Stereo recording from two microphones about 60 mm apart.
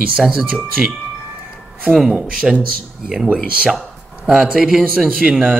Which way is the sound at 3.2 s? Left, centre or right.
Centre.